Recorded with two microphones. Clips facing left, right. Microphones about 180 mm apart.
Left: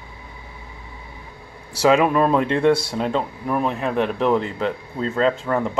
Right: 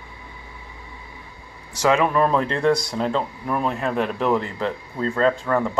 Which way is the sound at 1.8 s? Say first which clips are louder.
Left 2 dB; 15° left (ahead or behind).